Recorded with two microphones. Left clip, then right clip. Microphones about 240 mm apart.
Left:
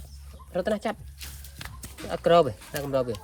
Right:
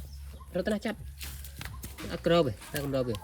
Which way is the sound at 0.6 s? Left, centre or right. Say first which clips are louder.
Left 5 dB; centre.